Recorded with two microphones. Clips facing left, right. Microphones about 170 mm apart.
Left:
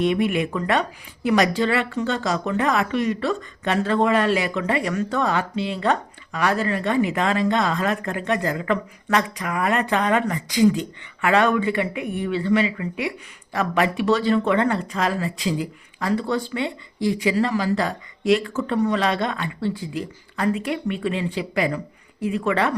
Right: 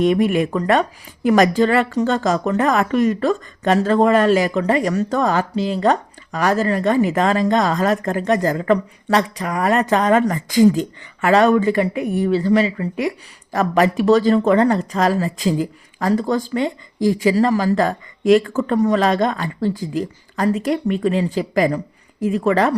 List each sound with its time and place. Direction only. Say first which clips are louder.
0.0 s speech: right 5 dB; 40° right (ahead or behind)